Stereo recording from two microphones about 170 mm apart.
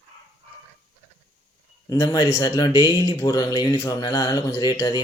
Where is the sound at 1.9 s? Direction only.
25° left (ahead or behind).